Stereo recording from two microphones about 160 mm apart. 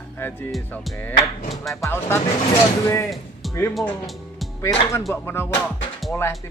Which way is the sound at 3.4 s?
Centre (ahead or behind).